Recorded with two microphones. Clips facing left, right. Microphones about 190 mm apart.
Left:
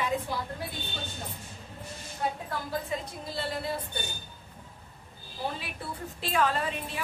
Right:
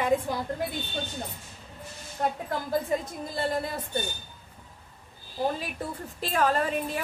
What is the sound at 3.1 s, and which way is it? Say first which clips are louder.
Speech: right 5 dB; 50° right (ahead or behind).